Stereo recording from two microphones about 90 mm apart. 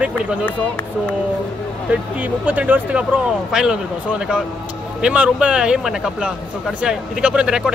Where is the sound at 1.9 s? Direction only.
15° right (ahead or behind).